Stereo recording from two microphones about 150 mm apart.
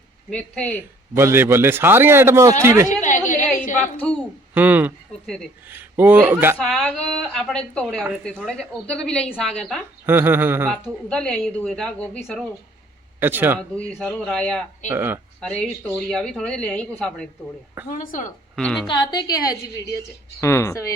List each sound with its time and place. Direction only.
0.3 s a woman's voice: 5° left (ahead or behind)
1.1 s a man's voice: 15° right (ahead or behind)
3.0 s a woman's voice: 55° left (ahead or behind)
4.5 s a man's voice: 10° right (ahead or behind)
6.6 s speech: centre (ahead or behind)
10.1 s a man's voice: 15° right (ahead or behind)
11.1 s a woman's voice: 5° left (ahead or behind)
13.1 s speech: 15° right (ahead or behind)
13.6 s speech: 5° left (ahead or behind)
14.8 s a man's voice: 15° right (ahead or behind)
15.4 s speech: 5° left (ahead or behind)
17.8 s a woman's voice: 65° left (ahead or behind)
18.5 s speech: 5° left (ahead or behind)
18.9 s a woman's voice: 30° left (ahead or behind)